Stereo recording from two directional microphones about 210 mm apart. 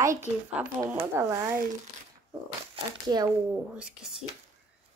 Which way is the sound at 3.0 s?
20° right (ahead or behind).